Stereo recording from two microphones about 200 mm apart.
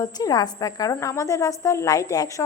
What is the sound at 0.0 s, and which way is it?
A woman's voice, 20° left (ahead or behind).